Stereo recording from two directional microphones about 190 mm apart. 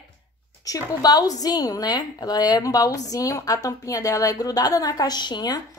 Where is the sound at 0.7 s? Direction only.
20° left (ahead or behind).